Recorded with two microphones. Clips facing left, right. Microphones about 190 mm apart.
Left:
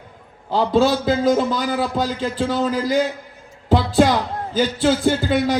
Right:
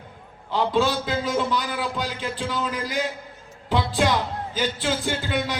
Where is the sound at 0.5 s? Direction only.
40° left (ahead or behind).